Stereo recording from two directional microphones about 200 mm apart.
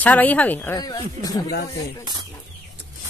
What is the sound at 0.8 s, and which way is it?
Speech, 20° left (ahead or behind).